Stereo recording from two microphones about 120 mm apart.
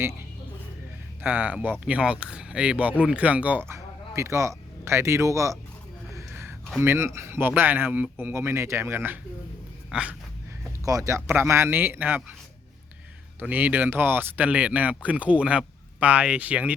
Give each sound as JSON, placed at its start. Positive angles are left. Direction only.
{"t": 1.2, "sound": "speech", "side_deg": -15}
{"t": 3.7, "sound": "speech", "side_deg": -25}
{"t": 6.1, "sound": "a sound", "side_deg": -20}
{"t": 6.7, "sound": "speech", "side_deg": -20}
{"t": 9.9, "sound": "speech", "side_deg": -10}
{"t": 10.8, "sound": "speech", "side_deg": -25}
{"t": 13.4, "sound": "speech", "side_deg": -15}